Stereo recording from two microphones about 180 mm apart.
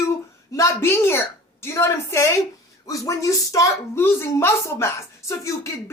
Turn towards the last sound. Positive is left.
turn(degrees=15)  # may be behind; listen again after turning